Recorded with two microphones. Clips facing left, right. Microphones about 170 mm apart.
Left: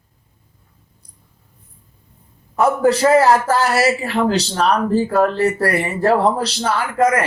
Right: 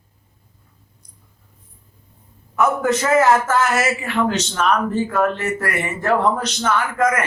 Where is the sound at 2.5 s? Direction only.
35° left (ahead or behind).